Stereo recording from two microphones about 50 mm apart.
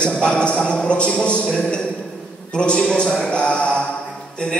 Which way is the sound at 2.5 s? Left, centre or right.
Centre.